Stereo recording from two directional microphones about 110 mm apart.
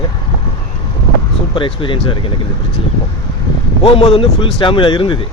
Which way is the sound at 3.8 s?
65° left (ahead or behind).